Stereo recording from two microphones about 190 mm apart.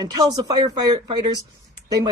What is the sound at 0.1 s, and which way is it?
Speech, 20° right (ahead or behind).